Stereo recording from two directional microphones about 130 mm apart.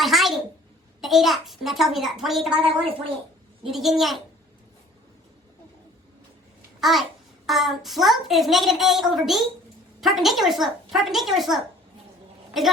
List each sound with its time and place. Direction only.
0.0 s a sound: centre (ahead or behind)
1.0 s a woman's voice: centre (ahead or behind)
2.6 s speech: 45° right (ahead or behind)
3.7 s a woman's voice: centre (ahead or behind)
6.7 s babbling: centre (ahead or behind)
7.4 s a woman's voice: centre (ahead or behind)